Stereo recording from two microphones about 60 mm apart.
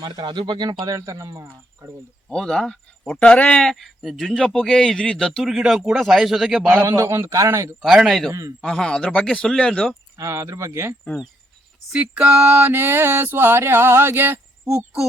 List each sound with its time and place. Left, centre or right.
0.9 s speech: right
2.3 s speech: centre
3.6 s a man's voice: centre
5.4 s a man's voice: centre
6.8 s speech: right
7.9 s a man's voice: centre
8.3 s speech: right
8.6 s speech: centre
10.2 s speech: right
11.9 s a sound: centre
12.5 s a sound: right